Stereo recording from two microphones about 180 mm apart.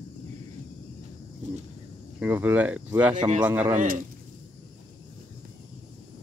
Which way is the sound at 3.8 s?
45° right (ahead or behind).